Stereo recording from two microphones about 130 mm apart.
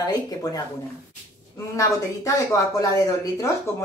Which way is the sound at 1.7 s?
25° left (ahead or behind).